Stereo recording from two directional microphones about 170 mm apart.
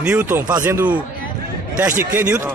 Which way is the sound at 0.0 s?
5° right (ahead or behind).